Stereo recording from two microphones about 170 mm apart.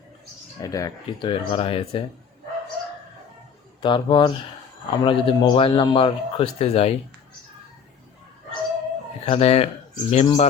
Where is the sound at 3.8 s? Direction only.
30° left (ahead or behind).